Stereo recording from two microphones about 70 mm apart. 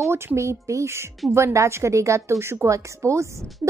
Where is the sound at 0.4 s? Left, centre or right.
Right.